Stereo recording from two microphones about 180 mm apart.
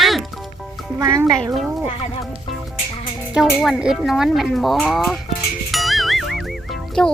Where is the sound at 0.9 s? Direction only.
20° right (ahead or behind).